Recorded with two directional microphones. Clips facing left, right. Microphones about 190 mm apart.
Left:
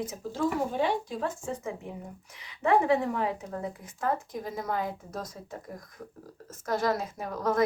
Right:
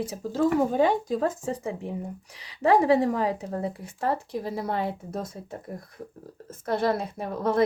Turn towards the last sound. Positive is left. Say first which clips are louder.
# right 3 dB
turn(degrees=-30)  # may be behind; listen again after turning